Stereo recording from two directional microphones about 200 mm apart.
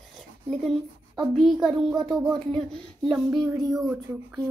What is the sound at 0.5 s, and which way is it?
A child's voice, centre (ahead or behind).